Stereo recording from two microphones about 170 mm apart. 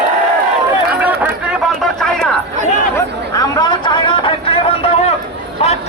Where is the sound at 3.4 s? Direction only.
25° left (ahead or behind).